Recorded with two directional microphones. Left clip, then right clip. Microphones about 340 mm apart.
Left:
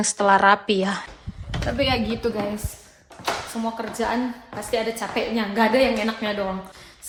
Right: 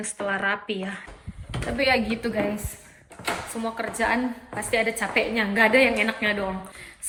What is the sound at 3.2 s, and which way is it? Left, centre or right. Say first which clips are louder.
A woman's voice: left 2 dB; centre.